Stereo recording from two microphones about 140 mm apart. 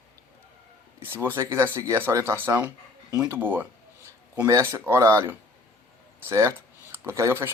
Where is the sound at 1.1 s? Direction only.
15° right (ahead or behind).